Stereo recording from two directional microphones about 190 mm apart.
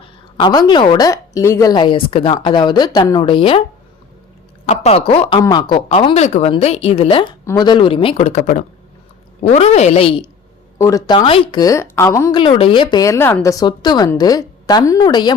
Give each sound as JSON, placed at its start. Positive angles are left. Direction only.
{"t": 0.3, "sound": "a woman's voice", "side_deg": 25}
{"t": 4.6, "sound": "a woman's voice", "side_deg": 35}
{"t": 10.8, "sound": "a woman's voice", "side_deg": 15}
{"t": 12.4, "sound": "a woman's voice", "side_deg": 25}